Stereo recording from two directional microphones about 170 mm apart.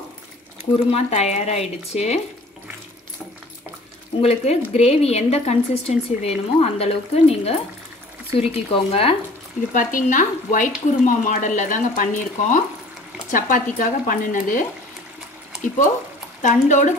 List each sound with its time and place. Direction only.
0.9 s a woman's voice: 40° left (ahead or behind)
4.2 s a woman's voice: 40° left (ahead or behind)
9.8 s speech: 50° left (ahead or behind)
16.4 s speech: 45° left (ahead or behind)